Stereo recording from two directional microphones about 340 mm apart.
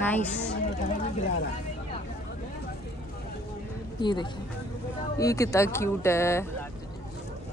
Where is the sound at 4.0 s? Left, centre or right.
Centre.